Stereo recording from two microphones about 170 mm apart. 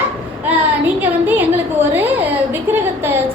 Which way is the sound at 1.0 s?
10° right (ahead or behind).